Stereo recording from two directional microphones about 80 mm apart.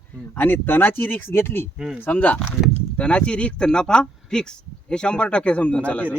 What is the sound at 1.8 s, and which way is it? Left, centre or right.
Speech, centre.